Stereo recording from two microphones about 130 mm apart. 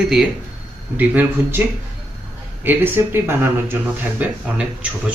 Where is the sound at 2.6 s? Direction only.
15° right (ahead or behind).